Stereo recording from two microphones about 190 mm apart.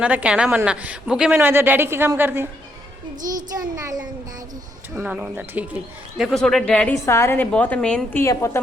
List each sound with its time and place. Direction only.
0.0 s a woman's voice: 5° right (ahead or behind)
3.2 s a child's voice: 45° right (ahead or behind)
3.8 s a sound: 20° right (ahead or behind)
4.9 s a woman's voice: 10° right (ahead or behind)
7.0 s a woman's voice: 15° left (ahead or behind)
8.2 s a woman's voice: 15° left (ahead or behind)